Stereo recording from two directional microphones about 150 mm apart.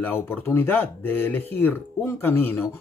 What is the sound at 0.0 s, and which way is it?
Speech, 15° left (ahead or behind).